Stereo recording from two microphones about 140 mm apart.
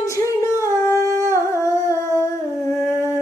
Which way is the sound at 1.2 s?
20° right (ahead or behind).